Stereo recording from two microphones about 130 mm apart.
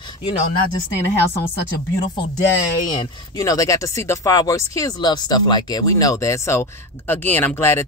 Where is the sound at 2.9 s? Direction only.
30° left (ahead or behind).